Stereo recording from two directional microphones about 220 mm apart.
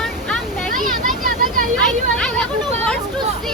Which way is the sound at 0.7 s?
40° right (ahead or behind).